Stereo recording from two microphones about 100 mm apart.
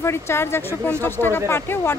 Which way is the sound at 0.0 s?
25° left (ahead or behind).